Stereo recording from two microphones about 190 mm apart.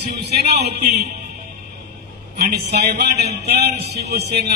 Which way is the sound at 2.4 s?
55° right (ahead or behind).